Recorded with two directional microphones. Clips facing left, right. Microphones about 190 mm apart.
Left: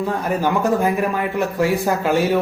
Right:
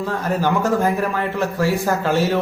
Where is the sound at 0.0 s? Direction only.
15° left (ahead or behind).